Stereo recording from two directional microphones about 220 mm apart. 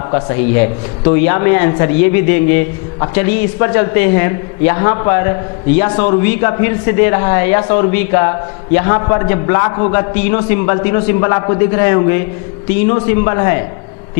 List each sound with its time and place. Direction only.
0.1 s a man's voice: 15° left (ahead or behind)